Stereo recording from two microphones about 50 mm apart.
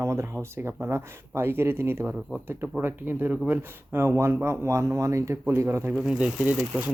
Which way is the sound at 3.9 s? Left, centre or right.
Right.